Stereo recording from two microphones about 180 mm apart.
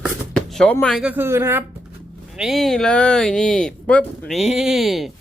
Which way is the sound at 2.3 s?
Centre (ahead or behind).